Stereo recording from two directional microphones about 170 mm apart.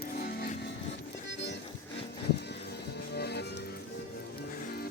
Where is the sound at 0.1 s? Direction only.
65° left (ahead or behind).